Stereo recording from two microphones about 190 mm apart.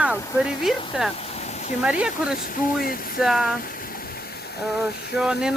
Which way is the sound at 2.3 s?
45° left (ahead or behind).